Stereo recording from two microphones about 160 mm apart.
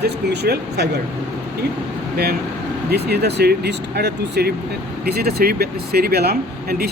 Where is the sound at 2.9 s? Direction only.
90° right.